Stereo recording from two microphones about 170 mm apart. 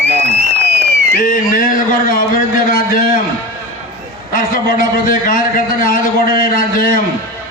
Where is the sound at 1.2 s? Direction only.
55° left (ahead or behind).